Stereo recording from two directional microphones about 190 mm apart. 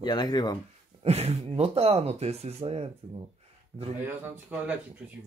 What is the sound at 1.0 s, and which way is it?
Speech, 35° right (ahead or behind).